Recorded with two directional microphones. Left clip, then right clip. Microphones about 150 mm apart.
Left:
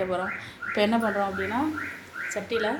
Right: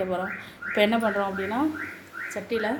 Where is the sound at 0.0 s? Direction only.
15° right (ahead or behind).